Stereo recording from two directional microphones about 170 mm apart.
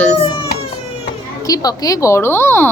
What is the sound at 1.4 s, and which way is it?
A woman's voice, 20° left (ahead or behind).